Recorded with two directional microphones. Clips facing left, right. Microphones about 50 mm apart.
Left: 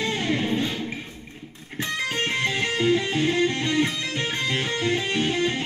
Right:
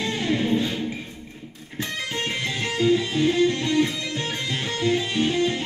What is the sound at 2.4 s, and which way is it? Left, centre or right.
Music, left.